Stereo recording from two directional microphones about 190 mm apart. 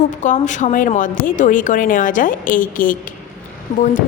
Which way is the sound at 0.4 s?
40° left (ahead or behind).